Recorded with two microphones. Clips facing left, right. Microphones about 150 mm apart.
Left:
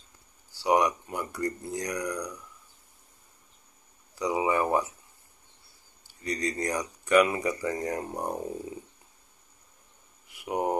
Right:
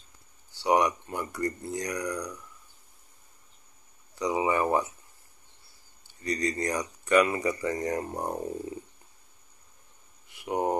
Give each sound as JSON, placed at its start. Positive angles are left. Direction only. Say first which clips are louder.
{"t": 0.7, "sound": "speech", "louder": "even", "side_deg": 10}
{"t": 4.1, "sound": "speech", "louder": "even", "side_deg": 10}
{"t": 6.2, "sound": "speech", "louder": "right 1 dB", "side_deg": 15}
{"t": 10.4, "sound": "speech", "louder": "right 1 dB", "side_deg": 15}